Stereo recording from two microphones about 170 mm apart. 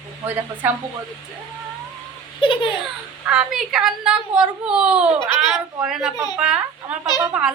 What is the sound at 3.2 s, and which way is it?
A child's voice, 5° right (ahead or behind).